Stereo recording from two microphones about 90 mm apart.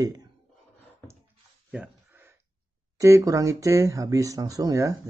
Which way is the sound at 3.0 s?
35° right (ahead or behind).